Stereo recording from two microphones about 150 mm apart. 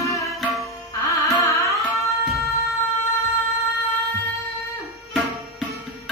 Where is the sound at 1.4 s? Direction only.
20° left (ahead or behind).